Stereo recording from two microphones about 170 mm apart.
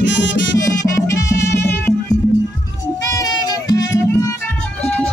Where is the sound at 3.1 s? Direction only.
20° left (ahead or behind).